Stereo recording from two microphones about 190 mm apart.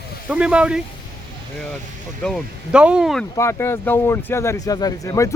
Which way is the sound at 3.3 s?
15° left (ahead or behind).